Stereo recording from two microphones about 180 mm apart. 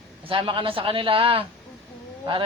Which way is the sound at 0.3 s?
30° right (ahead or behind).